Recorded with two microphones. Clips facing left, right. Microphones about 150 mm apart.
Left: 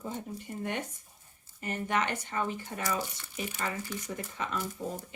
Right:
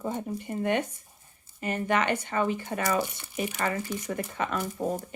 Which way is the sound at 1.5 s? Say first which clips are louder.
Right 4 dB; 85° right.